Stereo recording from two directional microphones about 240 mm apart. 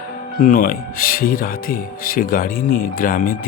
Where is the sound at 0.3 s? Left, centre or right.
Left.